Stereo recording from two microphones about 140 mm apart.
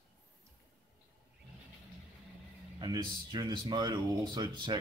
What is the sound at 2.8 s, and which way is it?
Speech, 30° right (ahead or behind).